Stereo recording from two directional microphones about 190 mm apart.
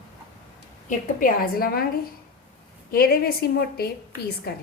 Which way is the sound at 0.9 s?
50° left (ahead or behind).